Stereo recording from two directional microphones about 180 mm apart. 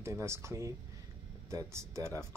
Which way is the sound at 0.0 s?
15° right (ahead or behind).